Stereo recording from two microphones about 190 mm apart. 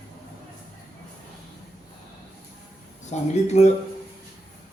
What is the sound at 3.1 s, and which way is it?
Speech, 35° left (ahead or behind).